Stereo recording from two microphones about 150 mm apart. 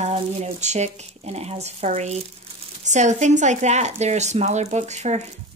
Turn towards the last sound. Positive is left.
turn(degrees=-50)  # may be behind; listen again after turning